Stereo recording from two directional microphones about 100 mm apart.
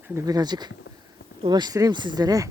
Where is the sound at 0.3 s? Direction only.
45° right (ahead or behind).